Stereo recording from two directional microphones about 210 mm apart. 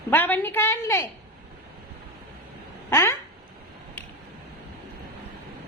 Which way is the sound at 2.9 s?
15° left (ahead or behind).